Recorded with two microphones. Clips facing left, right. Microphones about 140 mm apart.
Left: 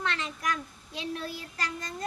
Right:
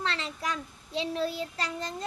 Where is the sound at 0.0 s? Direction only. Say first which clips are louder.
Even; 30° right (ahead or behind).